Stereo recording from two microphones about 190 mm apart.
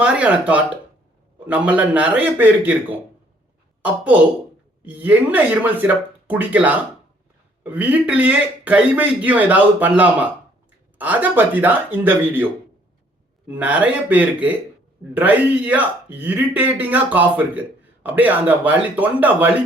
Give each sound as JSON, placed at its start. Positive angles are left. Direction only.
{"t": 0.0, "sound": "speech", "side_deg": -5}
{"t": 13.5, "sound": "speech", "side_deg": -10}